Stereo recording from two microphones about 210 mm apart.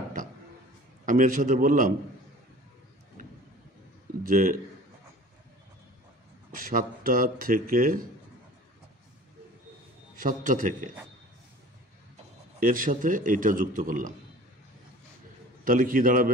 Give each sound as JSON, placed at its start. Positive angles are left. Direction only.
{"t": 1.0, "sound": "a man's voice", "side_deg": -40}
{"t": 4.2, "sound": "speech", "side_deg": -40}
{"t": 6.6, "sound": "speech", "side_deg": -40}
{"t": 10.2, "sound": "a man's voice", "side_deg": -40}
{"t": 12.6, "sound": "a man's voice", "side_deg": -40}
{"t": 15.6, "sound": "a man's voice", "side_deg": -40}